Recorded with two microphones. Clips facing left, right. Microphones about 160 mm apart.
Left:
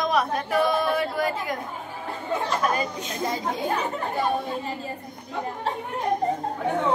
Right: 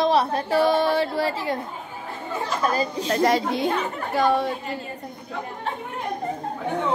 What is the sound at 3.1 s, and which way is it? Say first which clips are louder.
A woman's voice: right 9 dB; 85° right.